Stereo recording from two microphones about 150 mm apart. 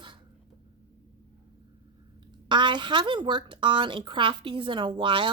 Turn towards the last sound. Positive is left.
turn(degrees=-35)  # may be behind; listen again after turning